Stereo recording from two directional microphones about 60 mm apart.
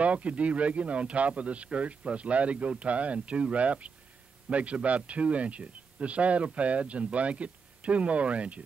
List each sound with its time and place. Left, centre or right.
0.0 s speech: right